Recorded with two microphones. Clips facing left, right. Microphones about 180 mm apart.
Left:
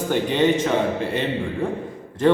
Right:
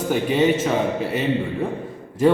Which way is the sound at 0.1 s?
5° right (ahead or behind).